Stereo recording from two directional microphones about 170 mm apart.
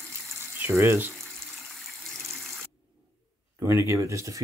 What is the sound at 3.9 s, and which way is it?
Speech, 15° right (ahead or behind).